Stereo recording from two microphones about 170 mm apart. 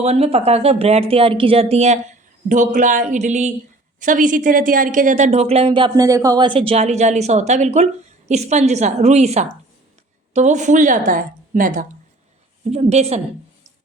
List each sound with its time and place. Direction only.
0.0 s a woman's voice: 40° right (ahead or behind)
12.7 s a woman's voice: 40° right (ahead or behind)